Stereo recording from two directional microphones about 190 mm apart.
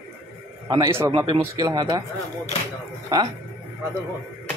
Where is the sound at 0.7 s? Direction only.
15° right (ahead or behind).